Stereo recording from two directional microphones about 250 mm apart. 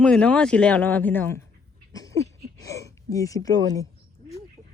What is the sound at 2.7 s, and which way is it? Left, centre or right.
Speech, centre.